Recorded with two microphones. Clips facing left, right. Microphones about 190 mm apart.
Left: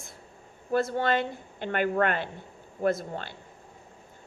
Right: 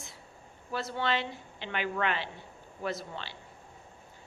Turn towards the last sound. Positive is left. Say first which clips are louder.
# left 8 dB
turn(degrees=50)  # may be behind; listen again after turning